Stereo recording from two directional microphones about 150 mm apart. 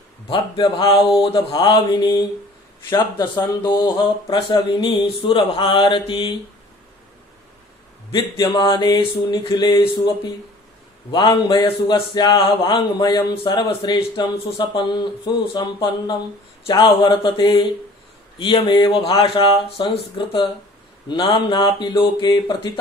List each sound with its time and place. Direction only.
0.3 s a man's voice: 35° left (ahead or behind)
1.2 s mantra: 30° left (ahead or behind)
3.6 s a man's voice: 30° left (ahead or behind)
8.1 s a man's voice: 30° left (ahead or behind)
11.1 s a man's voice: 30° left (ahead or behind)